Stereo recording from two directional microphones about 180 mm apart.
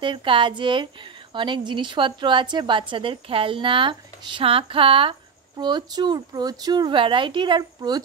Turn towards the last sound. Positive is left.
turn(degrees=-25)  # may be behind; listen again after turning